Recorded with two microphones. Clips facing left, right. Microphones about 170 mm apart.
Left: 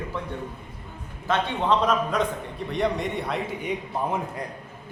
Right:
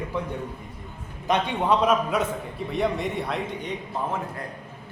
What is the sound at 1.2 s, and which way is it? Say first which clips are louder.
A man's voice: right 1 dB; 15° right (ahead or behind).